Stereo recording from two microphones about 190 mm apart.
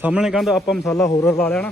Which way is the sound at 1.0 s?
15° left (ahead or behind).